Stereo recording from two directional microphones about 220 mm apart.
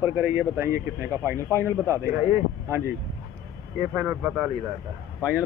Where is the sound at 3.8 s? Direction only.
10° right (ahead or behind).